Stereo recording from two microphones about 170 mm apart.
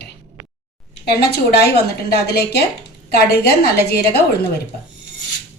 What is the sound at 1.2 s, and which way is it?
A woman's voice, 70° left (ahead or behind).